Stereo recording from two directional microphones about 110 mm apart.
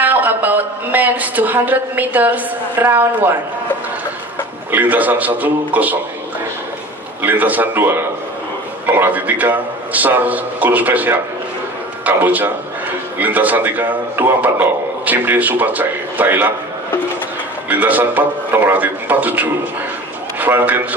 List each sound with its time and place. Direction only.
0.0 s a man's voice: 15° right (ahead or behind)
4.6 s a man's voice: 15° right (ahead or behind)
7.2 s a man's voice: 15° right (ahead or behind)
17.6 s a man's voice: 15° right (ahead or behind)